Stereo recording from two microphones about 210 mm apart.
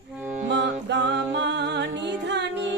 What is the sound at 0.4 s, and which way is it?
Music, 55° right (ahead or behind).